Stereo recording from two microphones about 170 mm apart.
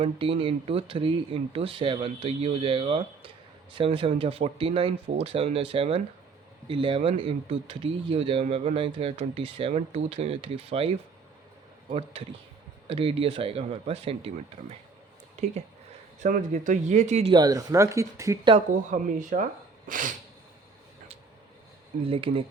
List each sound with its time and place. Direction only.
0.0 s speech: 30° right (ahead or behind)
16.2 s speech: 50° right (ahead or behind)
17.3 s speech: 20° right (ahead or behind)
18.5 s speech: 50° right (ahead or behind)
22.0 s speech: 30° right (ahead or behind)